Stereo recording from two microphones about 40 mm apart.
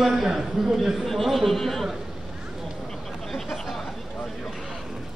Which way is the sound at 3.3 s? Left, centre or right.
Centre.